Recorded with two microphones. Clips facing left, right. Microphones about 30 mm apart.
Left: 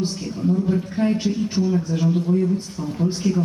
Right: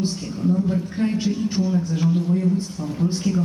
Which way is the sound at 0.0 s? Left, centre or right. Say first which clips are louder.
Even; centre.